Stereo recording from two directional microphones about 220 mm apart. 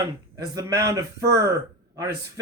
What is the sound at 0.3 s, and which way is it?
A man's voice, 15° right (ahead or behind).